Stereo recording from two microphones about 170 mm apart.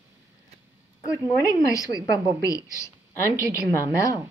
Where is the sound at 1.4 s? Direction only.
20° left (ahead or behind).